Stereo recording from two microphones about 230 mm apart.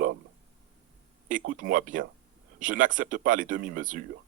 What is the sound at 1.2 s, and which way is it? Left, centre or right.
Speech, right.